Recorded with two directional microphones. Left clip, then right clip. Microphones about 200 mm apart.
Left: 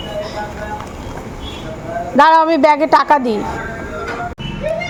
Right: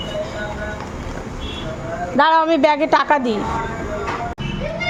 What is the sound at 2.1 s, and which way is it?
A woman's voice, 20° left (ahead or behind).